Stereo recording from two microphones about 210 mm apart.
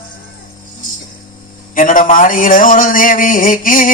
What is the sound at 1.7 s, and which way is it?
Speech, 40° left (ahead or behind).